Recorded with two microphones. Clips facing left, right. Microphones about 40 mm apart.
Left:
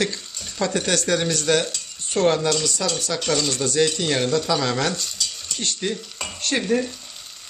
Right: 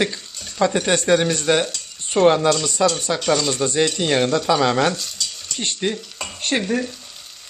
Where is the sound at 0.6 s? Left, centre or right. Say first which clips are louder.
Right 4 dB; centre.